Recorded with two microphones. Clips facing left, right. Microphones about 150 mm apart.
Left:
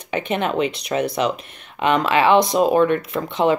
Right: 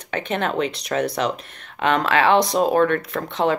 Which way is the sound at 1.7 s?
5° left (ahead or behind).